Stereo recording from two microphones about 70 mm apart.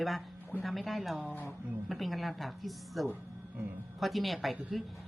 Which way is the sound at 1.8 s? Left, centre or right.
Centre.